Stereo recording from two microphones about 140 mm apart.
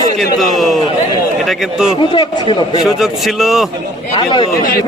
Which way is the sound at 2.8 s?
Centre (ahead or behind).